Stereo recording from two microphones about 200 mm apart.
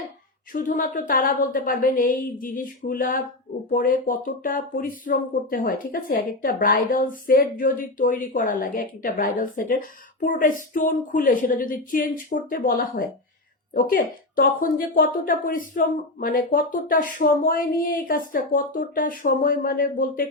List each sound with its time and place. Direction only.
0.5 s a woman's voice: 45° left (ahead or behind)